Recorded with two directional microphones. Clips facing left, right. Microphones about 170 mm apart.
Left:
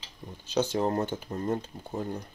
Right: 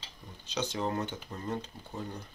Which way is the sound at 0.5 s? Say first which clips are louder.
Left 6 dB; 45° left (ahead or behind).